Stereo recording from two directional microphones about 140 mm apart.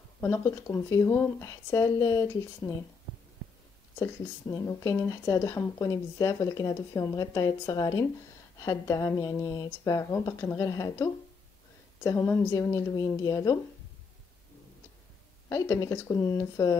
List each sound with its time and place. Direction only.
0.2 s speech: 15° left (ahead or behind)
4.0 s speech: 20° left (ahead or behind)
15.5 s speech: 20° left (ahead or behind)